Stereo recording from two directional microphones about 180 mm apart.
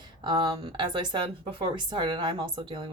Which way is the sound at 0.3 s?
30° right (ahead or behind).